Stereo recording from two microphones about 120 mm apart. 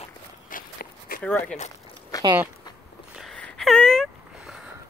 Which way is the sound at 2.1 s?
30° left (ahead or behind).